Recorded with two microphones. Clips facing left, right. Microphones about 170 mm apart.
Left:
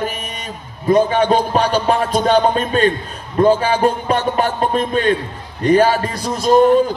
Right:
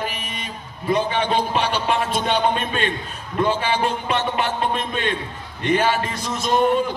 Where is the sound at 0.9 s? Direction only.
45° left (ahead or behind).